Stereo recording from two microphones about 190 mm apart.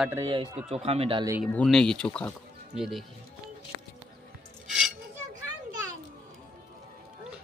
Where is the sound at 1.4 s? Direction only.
5° left (ahead or behind).